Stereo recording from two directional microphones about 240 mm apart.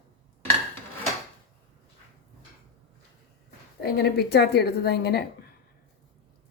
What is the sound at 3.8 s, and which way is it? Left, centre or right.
A woman's voice, left.